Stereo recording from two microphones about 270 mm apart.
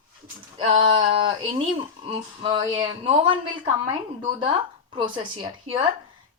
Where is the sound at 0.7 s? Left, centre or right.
Centre.